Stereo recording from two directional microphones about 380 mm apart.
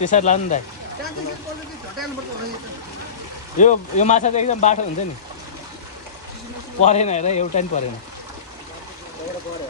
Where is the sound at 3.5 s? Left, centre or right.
Centre.